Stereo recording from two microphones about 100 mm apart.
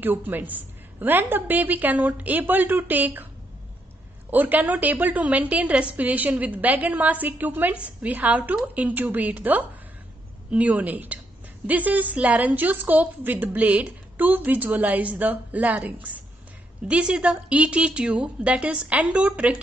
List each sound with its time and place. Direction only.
0.0 s a woman's voice: 20° right (ahead or behind)
4.3 s a woman's voice: 15° right (ahead or behind)